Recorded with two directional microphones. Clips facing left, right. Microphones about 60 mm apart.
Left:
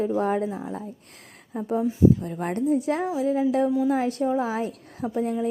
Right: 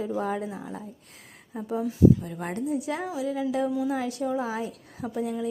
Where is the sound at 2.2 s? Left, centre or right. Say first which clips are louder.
Left 5 dB; left.